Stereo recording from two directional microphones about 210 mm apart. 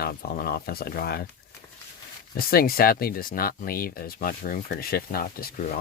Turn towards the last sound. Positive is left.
turn(degrees=40)  # may be behind; listen again after turning